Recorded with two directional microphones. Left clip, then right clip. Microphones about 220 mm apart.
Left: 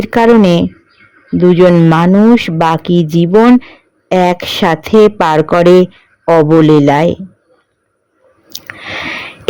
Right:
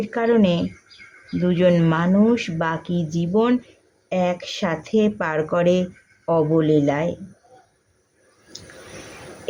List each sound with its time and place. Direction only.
0.0 s a man's voice: 45° left (ahead or behind)